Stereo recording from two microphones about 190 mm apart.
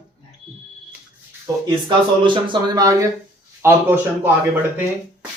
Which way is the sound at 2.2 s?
25° right (ahead or behind).